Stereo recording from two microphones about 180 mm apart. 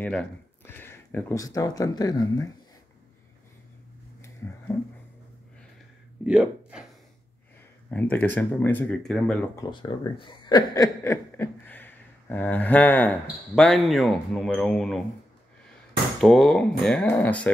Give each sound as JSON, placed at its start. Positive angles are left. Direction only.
{"t": 0.0, "sound": "speech", "side_deg": 5}
{"t": 4.7, "sound": "speech", "side_deg": 15}
{"t": 6.2, "sound": "speech", "side_deg": -5}
{"t": 7.9, "sound": "speech", "side_deg": 10}
{"t": 9.6, "sound": "speech", "side_deg": 25}
{"t": 16.2, "sound": "speech", "side_deg": 0}